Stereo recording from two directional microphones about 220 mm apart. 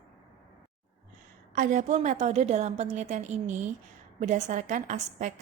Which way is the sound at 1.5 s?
35° right (ahead or behind).